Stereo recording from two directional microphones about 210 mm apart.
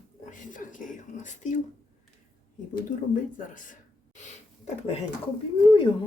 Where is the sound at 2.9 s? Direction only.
35° left (ahead or behind).